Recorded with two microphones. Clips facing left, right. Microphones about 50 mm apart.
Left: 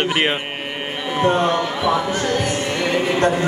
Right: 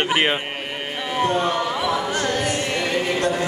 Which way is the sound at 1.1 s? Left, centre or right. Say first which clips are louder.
Left 3 dB; centre.